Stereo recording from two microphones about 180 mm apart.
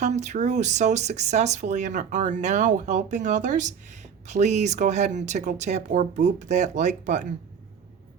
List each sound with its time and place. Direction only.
0.0 s speech: 40° right (ahead or behind)